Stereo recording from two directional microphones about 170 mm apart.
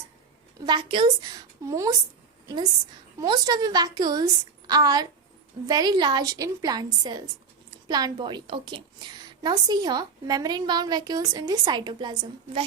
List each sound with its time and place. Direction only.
0.6 s a woman's voice: 25° right (ahead or behind)
3.2 s a woman's voice: 25° right (ahead or behind)